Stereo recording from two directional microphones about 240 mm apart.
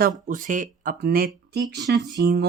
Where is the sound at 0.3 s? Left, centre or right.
Right.